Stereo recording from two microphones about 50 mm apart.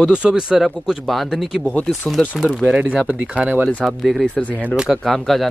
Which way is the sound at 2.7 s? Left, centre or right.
Right.